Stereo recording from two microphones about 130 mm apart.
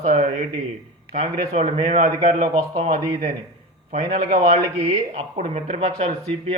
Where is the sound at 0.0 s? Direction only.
60° right (ahead or behind).